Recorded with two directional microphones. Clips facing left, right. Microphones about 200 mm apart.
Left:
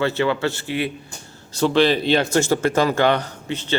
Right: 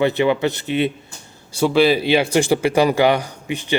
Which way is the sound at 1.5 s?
10° right (ahead or behind).